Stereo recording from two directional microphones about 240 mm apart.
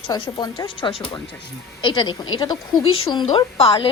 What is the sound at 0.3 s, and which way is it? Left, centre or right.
A woman's voice, centre.